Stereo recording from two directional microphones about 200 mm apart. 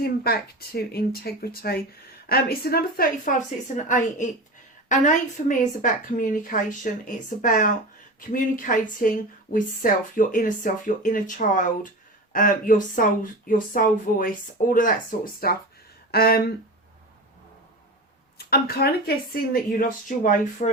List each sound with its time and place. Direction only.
0.0 s a woman's voice: 50° left (ahead or behind)
18.3 s speech: 50° left (ahead or behind)